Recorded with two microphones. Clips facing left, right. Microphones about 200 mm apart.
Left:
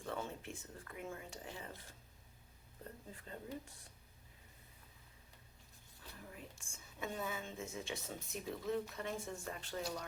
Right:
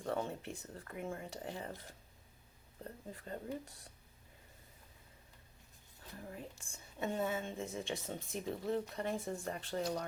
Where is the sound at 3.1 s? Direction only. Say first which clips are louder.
Right 5 dB; 40° right (ahead or behind).